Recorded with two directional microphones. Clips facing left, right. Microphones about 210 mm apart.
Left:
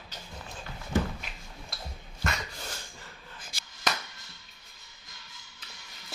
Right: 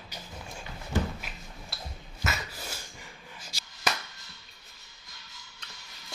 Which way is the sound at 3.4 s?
55° left (ahead or behind).